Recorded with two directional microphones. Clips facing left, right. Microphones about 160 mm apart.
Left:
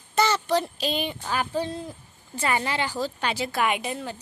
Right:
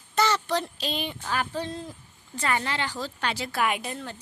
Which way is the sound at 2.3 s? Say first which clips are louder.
Left 2 dB; 10° left (ahead or behind).